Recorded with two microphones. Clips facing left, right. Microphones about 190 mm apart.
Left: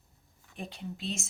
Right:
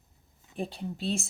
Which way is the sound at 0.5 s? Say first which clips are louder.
Right 6 dB; 35° right (ahead or behind).